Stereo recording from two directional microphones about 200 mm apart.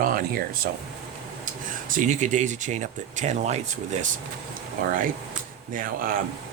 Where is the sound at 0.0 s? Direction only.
45° right (ahead or behind).